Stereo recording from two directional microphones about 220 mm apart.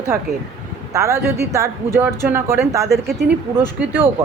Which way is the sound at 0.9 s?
10° right (ahead or behind).